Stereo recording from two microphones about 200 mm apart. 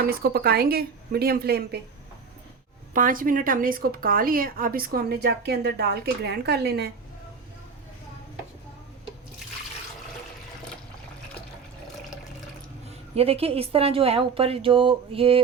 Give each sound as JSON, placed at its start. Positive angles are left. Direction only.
{"t": 0.0, "sound": "speech", "side_deg": -50}
{"t": 2.9, "sound": "speech", "side_deg": -45}
{"t": 13.1, "sound": "a woman's voice", "side_deg": -30}